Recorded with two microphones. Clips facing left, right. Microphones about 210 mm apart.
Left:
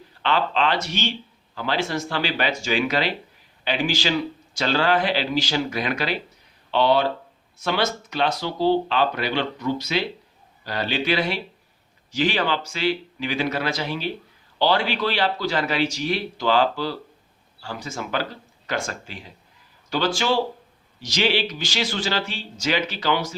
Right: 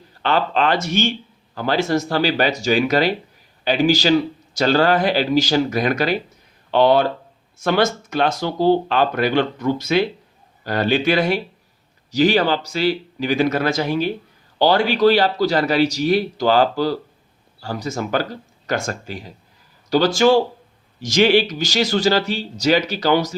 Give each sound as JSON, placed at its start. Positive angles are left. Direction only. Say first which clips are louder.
{"t": 0.2, "sound": "a man's voice", "louder": "right 3 dB", "side_deg": -45}